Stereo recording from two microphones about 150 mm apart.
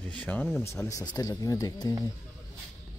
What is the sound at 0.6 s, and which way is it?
Speech, 20° left (ahead or behind).